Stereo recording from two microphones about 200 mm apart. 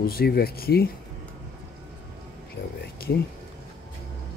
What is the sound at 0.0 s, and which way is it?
Speech, 50° left (ahead or behind).